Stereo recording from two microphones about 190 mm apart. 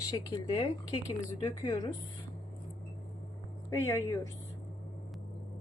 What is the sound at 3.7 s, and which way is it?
Speech, 15° left (ahead or behind).